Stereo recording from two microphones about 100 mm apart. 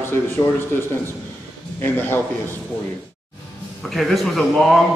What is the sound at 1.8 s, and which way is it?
Speech, 20° left (ahead or behind).